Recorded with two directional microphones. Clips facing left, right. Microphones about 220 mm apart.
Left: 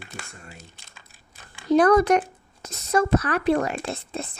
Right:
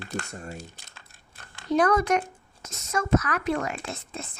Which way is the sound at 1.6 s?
35° left (ahead or behind).